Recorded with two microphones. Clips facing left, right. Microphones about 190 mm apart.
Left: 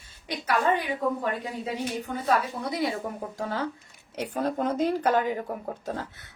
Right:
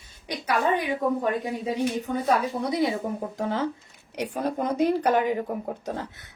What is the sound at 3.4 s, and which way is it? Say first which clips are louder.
Speech: right 3 dB; 20° right (ahead or behind).